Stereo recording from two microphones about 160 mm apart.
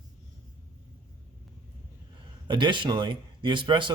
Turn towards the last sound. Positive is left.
turn(degrees=-30)  # may be behind; listen again after turning